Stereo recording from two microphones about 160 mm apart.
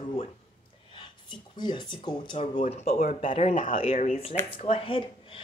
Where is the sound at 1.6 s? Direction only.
30° left (ahead or behind).